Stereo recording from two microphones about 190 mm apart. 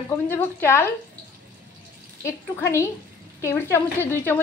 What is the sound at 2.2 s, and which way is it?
A woman's voice, 15° left (ahead or behind).